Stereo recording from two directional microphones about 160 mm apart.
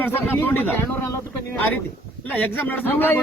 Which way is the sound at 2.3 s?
10° left (ahead or behind).